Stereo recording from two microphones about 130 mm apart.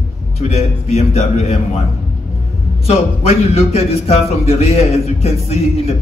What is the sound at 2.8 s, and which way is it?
Speech, 50° left (ahead or behind).